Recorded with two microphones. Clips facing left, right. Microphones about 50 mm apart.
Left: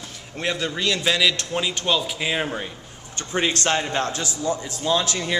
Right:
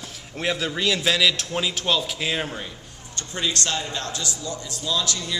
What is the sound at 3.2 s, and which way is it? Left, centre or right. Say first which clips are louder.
Speech: left 6 dB; left.